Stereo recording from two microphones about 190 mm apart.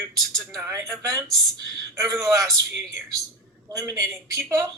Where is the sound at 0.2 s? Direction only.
Centre (ahead or behind).